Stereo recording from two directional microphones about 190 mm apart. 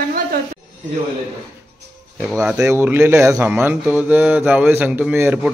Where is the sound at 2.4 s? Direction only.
5° right (ahead or behind).